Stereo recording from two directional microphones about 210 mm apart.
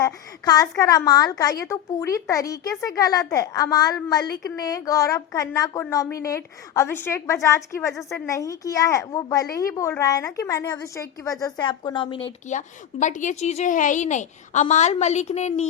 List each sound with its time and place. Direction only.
0.0 s a woman's voice: 15° left (ahead or behind)
12.5 s a woman's voice: 35° left (ahead or behind)